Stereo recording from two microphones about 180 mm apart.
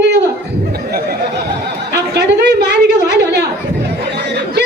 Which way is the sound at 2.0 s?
70° right (ahead or behind).